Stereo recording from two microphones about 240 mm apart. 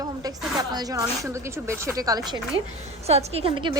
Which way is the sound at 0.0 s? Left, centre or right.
Centre.